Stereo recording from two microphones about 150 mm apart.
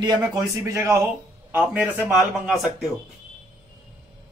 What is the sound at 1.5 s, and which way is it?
Speech, 10° right (ahead or behind).